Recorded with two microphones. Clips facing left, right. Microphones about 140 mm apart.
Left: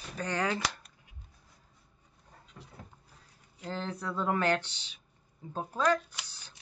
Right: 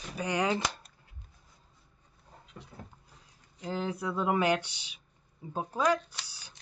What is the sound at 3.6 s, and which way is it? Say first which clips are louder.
Speech: right 3 dB; 10° right (ahead or behind).